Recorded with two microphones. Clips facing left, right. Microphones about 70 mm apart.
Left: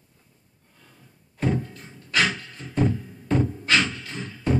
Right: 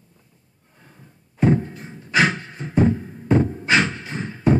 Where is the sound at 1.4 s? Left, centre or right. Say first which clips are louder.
Right 7 dB; right.